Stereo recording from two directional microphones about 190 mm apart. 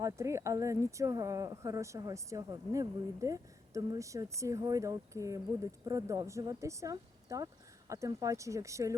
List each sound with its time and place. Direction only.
0.0 s speech: 15° right (ahead or behind)